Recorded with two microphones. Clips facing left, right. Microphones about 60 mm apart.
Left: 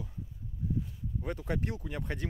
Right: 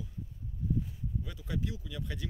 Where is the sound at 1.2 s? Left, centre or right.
Left.